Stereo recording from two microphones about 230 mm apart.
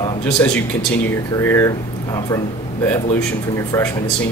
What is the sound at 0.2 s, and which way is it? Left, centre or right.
Speech, centre.